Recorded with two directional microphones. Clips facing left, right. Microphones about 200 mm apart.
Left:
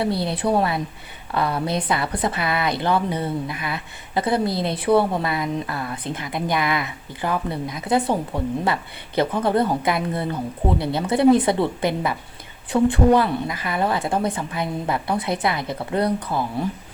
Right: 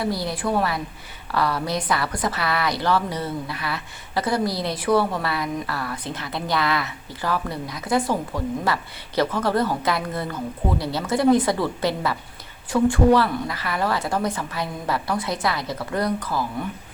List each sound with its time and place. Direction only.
0.1 s a woman's voice: 60° left (ahead or behind)
0.4 s speech: 25° left (ahead or behind)